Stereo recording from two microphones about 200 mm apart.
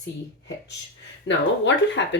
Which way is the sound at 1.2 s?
65° left (ahead or behind).